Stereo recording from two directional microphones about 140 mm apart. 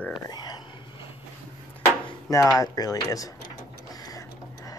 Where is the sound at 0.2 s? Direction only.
30° left (ahead or behind).